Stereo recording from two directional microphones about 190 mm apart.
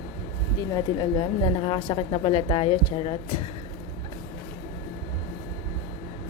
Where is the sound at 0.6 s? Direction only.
20° left (ahead or behind).